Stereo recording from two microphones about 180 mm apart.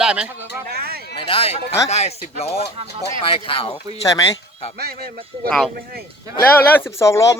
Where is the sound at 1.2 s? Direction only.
30° left (ahead or behind).